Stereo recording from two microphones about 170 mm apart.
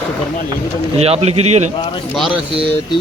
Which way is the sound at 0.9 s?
35° right (ahead or behind).